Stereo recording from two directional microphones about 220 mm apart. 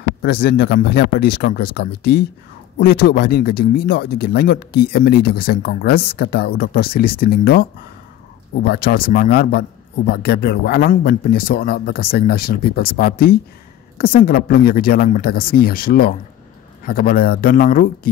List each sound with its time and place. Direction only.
0.2 s speech: 45° left (ahead or behind)
8.6 s speech: 45° left (ahead or behind)